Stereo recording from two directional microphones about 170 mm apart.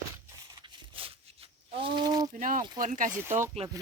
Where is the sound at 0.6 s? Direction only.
35° right (ahead or behind).